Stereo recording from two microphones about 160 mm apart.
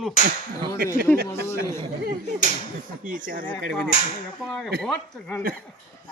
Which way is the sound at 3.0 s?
55° right (ahead or behind).